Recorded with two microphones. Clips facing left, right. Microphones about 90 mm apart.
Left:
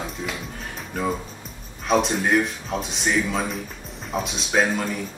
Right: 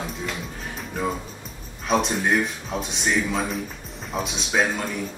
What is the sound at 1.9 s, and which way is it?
Speech, centre (ahead or behind).